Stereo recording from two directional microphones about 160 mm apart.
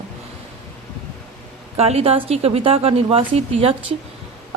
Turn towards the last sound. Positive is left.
turn(degrees=-35)  # may be behind; listen again after turning